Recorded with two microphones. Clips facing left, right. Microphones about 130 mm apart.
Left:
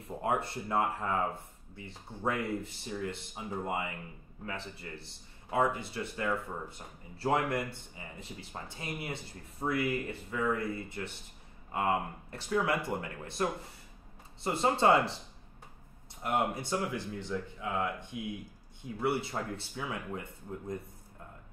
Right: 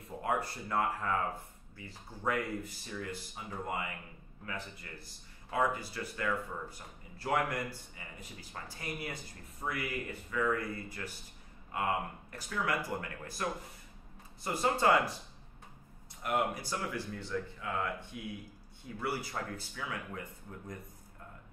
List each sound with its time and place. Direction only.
0.0 s speech: 25° left (ahead or behind)
16.2 s speech: 30° left (ahead or behind)